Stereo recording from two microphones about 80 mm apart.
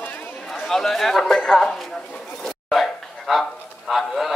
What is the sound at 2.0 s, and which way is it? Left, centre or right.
Speech, centre.